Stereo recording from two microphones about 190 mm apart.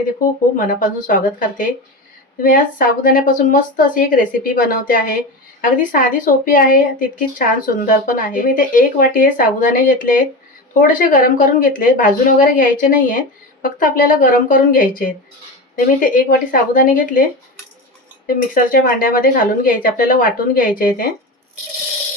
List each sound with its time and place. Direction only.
0.5 s speech: 45° left (ahead or behind)
18.3 s speech: 50° left (ahead or behind)